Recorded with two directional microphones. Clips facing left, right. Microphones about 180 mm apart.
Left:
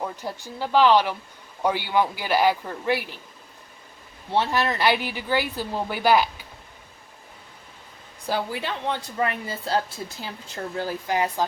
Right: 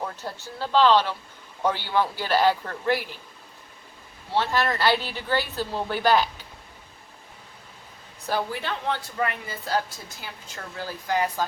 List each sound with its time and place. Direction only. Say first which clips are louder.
0.0 s a woman's voice: left 2 dB; 15° left (ahead or behind)
4.3 s a woman's voice: left 1 dB; 20° left (ahead or behind)
8.3 s a woman's voice: left 1 dB; 15° left (ahead or behind)
9.2 s a woman's voice: left 3 dB; 30° left (ahead or behind)